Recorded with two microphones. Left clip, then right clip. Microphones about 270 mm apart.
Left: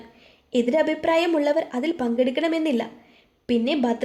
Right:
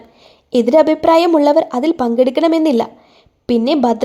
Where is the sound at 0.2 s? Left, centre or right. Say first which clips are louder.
Right 8 dB; right.